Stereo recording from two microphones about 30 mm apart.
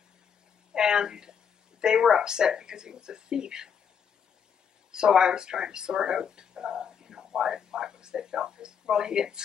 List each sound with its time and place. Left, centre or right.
0.7 s speech: right
4.9 s speech: right